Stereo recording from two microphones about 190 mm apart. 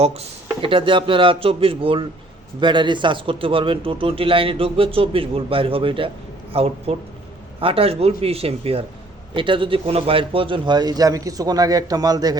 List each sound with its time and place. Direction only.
0.0 s speech: 30° right (ahead or behind)